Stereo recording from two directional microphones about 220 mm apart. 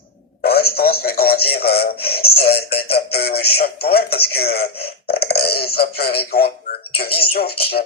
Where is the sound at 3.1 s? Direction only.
45° left (ahead or behind).